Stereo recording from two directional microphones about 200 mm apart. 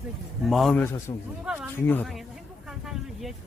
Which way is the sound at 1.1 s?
25° left (ahead or behind).